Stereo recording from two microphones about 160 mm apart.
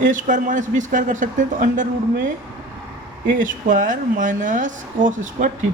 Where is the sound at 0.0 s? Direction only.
55° right (ahead or behind).